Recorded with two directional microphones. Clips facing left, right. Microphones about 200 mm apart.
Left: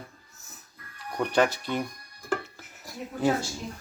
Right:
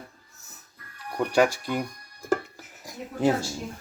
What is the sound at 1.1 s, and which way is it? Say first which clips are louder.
Speech: right 2 dB; 5° right (ahead or behind).